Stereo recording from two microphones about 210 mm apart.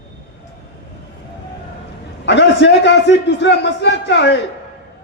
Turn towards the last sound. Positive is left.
turn(degrees=55)  # may be behind; listen again after turning